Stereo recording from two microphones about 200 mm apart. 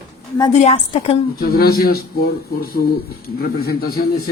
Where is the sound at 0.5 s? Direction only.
35° left (ahead or behind).